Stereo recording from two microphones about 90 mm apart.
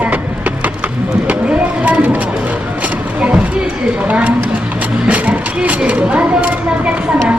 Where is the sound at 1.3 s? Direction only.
15° right (ahead or behind).